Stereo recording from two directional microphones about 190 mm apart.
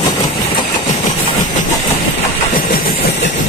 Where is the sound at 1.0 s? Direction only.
45° left (ahead or behind).